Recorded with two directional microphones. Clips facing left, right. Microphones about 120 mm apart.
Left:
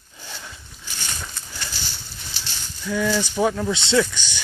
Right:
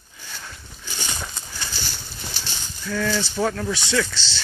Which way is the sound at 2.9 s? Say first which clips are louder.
Left 2 dB; 15° left (ahead or behind).